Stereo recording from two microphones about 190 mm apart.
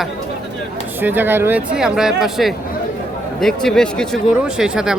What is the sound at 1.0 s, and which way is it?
Speech, 10° right (ahead or behind).